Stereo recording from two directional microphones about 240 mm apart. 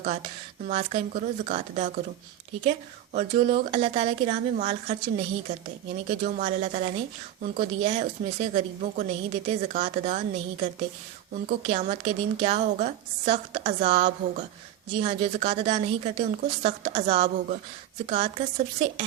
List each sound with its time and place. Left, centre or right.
0.7 s a woman's voice: right